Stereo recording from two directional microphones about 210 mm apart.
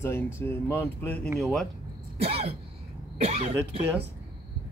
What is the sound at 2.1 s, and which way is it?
Speech, 30° right (ahead or behind).